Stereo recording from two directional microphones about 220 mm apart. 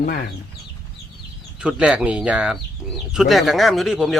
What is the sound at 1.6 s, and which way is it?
Speech, 5° right (ahead or behind).